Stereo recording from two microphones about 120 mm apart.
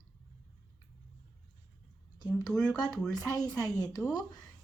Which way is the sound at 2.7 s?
30° left (ahead or behind).